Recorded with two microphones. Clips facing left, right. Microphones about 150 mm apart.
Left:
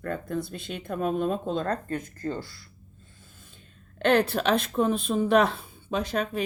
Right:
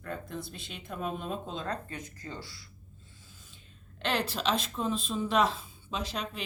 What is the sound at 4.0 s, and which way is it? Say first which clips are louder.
Speech: left 10 dB; 55° left (ahead or behind).